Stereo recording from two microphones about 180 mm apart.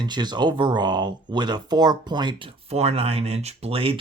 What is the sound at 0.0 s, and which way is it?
Speech, 25° right (ahead or behind).